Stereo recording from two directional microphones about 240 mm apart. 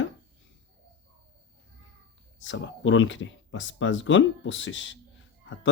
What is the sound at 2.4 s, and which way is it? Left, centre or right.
Speech, left.